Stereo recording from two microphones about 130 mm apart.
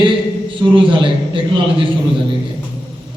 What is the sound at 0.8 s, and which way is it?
Speech, 40° right (ahead or behind).